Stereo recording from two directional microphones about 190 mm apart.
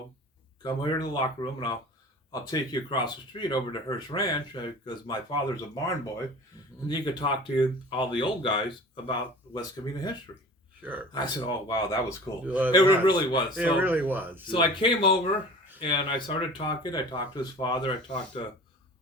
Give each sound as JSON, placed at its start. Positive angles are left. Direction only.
{"t": 0.6, "sound": "speech", "side_deg": 25}
{"t": 6.8, "sound": "speech", "side_deg": 20}
{"t": 12.5, "sound": "speech", "side_deg": -10}
{"t": 13.1, "sound": "speech", "side_deg": 25}
{"t": 13.6, "sound": "speech", "side_deg": -10}
{"t": 14.5, "sound": "speech", "side_deg": 25}